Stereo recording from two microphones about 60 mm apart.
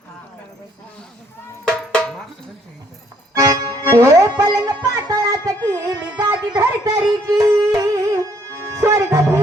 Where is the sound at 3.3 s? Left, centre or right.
Right.